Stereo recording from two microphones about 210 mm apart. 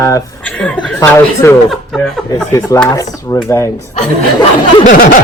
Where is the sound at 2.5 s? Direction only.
15° left (ahead or behind).